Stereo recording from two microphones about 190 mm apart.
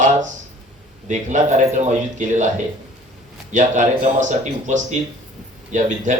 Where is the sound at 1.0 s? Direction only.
40° right (ahead or behind).